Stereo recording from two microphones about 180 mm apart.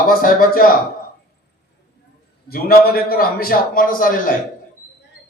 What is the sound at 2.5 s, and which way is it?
A man's voice, 55° left (ahead or behind).